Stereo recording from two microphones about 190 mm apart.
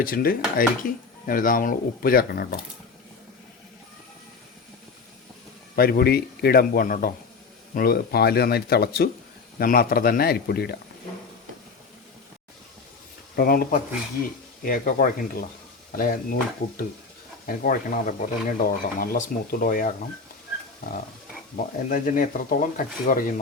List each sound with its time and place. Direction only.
0.0 s speech: 50° left (ahead or behind)
5.7 s speech: 55° left (ahead or behind)
13.3 s speech: 50° left (ahead or behind)
21.5 s speech: 45° left (ahead or behind)